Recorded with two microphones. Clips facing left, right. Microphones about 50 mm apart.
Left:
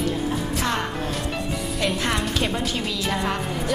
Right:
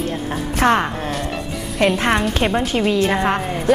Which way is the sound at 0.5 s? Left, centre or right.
Right.